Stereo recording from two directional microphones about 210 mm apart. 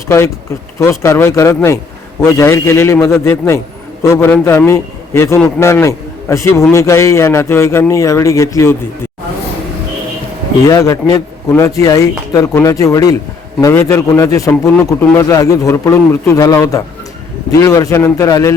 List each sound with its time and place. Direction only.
0.8 s a man's voice: 15° left (ahead or behind)
10.7 s a man's voice: 15° left (ahead or behind)